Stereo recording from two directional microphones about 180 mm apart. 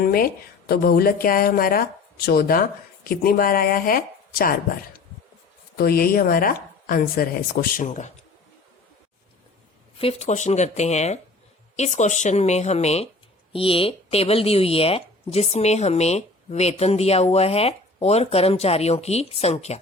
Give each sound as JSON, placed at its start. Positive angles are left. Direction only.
{"t": 0.0, "sound": "a woman's voice", "side_deg": 55}
{"t": 10.0, "sound": "speech", "side_deg": 35}